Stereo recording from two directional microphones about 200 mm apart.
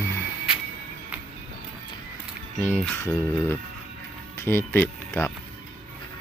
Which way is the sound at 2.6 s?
5° left (ahead or behind).